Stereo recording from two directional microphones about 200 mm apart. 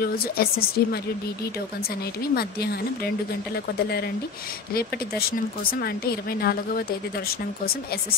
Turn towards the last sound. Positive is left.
turn(degrees=50)  # may be behind; listen again after turning